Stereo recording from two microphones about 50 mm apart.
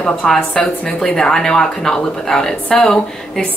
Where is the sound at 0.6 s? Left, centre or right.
Centre.